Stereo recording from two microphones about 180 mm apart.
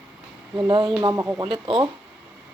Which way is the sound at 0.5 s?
25° right (ahead or behind).